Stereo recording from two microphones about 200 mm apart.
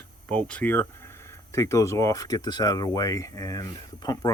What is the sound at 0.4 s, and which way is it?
Speech, 5° left (ahead or behind).